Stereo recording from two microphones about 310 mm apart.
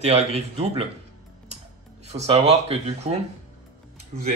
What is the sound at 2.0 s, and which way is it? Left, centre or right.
Speech, right.